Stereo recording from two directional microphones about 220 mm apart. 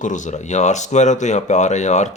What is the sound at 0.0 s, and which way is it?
Speech, 35° left (ahead or behind).